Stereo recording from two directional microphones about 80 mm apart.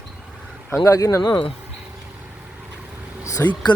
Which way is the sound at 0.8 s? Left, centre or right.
Left.